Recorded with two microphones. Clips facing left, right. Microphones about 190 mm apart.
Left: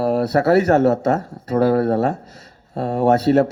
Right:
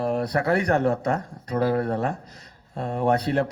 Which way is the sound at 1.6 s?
40° left (ahead or behind).